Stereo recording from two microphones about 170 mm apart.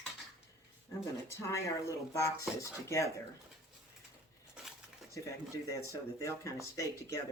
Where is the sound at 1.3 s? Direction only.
20° left (ahead or behind).